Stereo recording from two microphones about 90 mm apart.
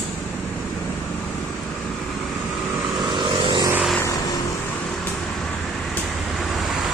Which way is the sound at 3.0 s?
55° right (ahead or behind).